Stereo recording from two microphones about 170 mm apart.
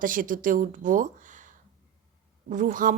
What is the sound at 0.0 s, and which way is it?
A woman's voice, 55° right (ahead or behind).